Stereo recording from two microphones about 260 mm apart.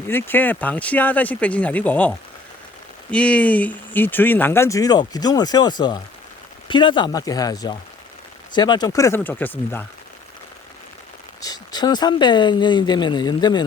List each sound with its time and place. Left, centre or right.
0.1 s speech: centre
11.4 s speech: centre